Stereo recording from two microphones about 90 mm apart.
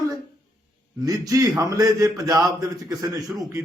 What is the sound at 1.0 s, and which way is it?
Speech, 40° right (ahead or behind).